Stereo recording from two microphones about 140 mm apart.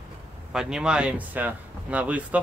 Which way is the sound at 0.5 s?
5° right (ahead or behind).